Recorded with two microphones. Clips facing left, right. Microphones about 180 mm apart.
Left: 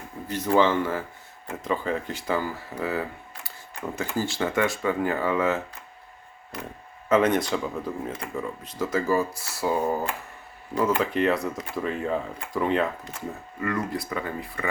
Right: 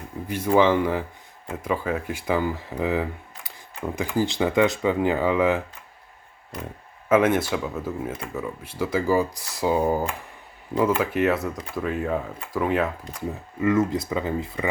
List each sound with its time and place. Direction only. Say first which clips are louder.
0.3 s speech: right 2 dB; 10° right (ahead or behind)
7.1 s speech: right 2 dB; 5° right (ahead or behind)